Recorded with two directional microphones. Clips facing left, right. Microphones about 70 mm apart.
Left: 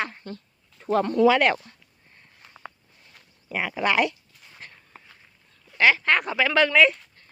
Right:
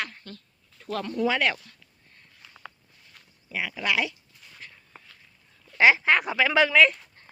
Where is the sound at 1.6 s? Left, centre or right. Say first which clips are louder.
Left 3 dB; left.